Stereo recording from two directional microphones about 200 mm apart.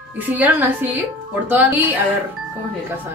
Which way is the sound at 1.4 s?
10° right (ahead or behind).